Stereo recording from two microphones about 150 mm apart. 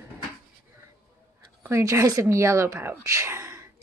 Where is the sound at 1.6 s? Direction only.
20° right (ahead or behind).